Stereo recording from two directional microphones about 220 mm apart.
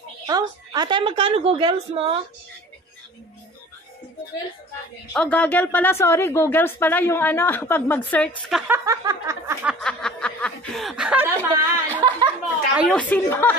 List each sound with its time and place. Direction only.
0.3 s a woman's voice: 15° right (ahead or behind)
5.1 s speech: 5° left (ahead or behind)
8.5 s snicker: 5° right (ahead or behind)
13.1 s speech: 10° left (ahead or behind)